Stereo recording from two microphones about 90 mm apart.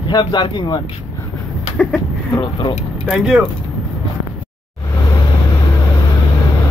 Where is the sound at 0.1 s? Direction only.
60° left (ahead or behind).